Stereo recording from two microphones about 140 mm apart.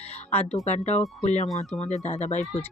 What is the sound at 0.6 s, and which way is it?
Speech, 55° left (ahead or behind).